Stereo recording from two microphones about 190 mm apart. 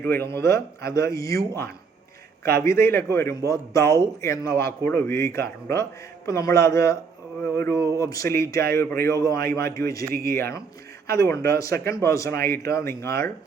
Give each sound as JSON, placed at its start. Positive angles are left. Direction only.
{"t": 0.0, "sound": "a man's voice", "side_deg": 10}